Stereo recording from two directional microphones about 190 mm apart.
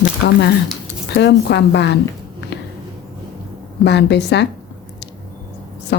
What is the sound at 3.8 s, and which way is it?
Speech, 65° left (ahead or behind).